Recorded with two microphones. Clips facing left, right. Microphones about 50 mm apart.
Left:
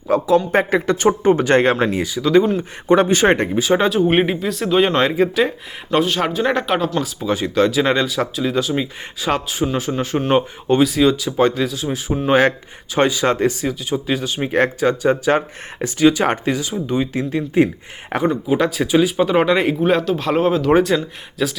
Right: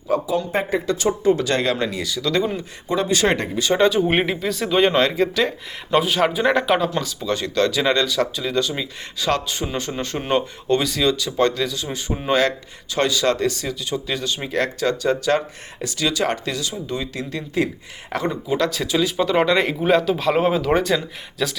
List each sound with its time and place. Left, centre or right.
0.1 s speech: left
0.9 s speech: left
1.9 s speech: left
3.1 s speech: left
3.6 s speech: centre
6.0 s speech: centre
7.3 s speech: centre
12.3 s speech: left
14.4 s speech: left; by 20.7 s centre
20.7 s speech: centre